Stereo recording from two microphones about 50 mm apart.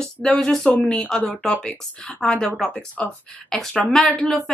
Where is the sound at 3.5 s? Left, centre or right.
Centre.